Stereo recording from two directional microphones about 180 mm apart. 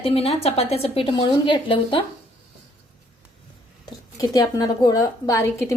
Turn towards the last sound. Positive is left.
turn(degrees=15)  # may be behind; listen again after turning